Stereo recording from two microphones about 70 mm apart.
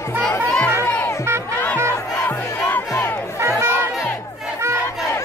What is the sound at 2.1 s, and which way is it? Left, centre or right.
Crowd, left.